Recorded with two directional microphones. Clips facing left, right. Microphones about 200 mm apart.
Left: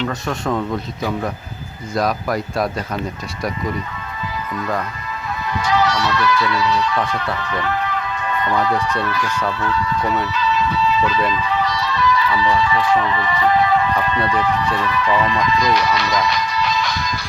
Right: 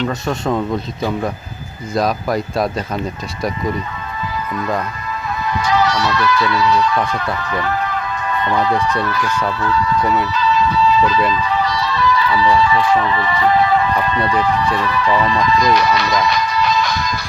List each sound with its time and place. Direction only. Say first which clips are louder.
0.1 s speech: right 3 dB; 20° right (ahead or behind)
2.0 s speech: right 2 dB; 25° right (ahead or behind)
5.6 s speech: right 1 dB; 40° right (ahead or behind)
7.4 s music: right 2 dB; 40° right (ahead or behind)
8.4 s speech: right 2 dB; 25° right (ahead or behind)
10.5 s music: right 4 dB; 35° right (ahead or behind)
11.3 s speech: right 2 dB; 40° right (ahead or behind)